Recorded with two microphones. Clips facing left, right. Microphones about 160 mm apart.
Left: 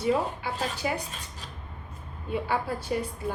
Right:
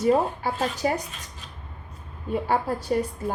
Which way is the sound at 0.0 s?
45° right (ahead or behind).